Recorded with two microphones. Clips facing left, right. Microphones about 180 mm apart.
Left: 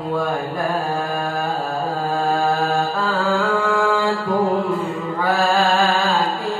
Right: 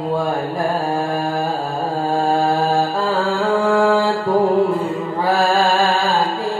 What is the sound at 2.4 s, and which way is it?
Mantra, 30° right (ahead or behind).